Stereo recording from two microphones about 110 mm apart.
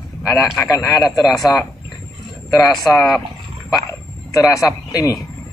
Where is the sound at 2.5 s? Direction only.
30° left (ahead or behind).